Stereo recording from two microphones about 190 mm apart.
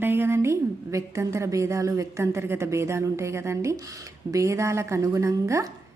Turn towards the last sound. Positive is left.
turn(degrees=-15)  # may be behind; listen again after turning